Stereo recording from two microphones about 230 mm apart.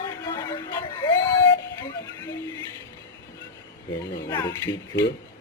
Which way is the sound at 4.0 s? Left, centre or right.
Centre.